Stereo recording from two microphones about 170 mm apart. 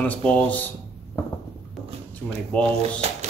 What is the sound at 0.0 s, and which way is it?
Speech, 10° left (ahead or behind).